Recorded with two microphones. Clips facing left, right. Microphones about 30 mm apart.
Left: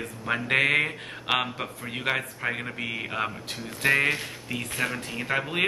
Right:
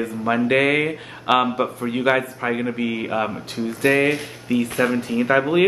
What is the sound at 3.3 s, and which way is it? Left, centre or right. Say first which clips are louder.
Speech: right 9 dB; centre.